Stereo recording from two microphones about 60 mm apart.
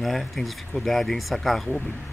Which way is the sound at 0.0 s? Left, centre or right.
Centre.